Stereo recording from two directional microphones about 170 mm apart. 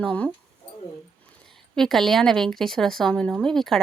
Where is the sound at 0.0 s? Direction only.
5° left (ahead or behind).